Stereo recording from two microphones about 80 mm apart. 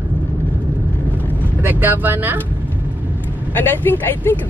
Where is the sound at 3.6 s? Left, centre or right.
Left.